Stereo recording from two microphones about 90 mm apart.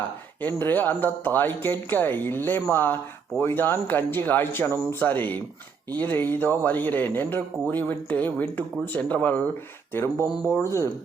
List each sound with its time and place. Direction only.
0.4 s speech: 20° left (ahead or behind)
4.9 s speech: 20° left (ahead or behind)